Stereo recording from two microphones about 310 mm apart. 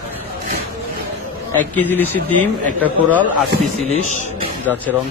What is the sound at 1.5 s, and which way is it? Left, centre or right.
Speech, centre.